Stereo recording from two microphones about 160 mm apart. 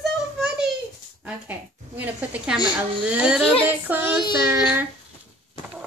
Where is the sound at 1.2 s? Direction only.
10° right (ahead or behind).